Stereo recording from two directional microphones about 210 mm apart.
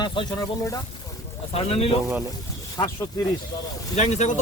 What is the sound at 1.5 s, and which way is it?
Speech, 30° left (ahead or behind).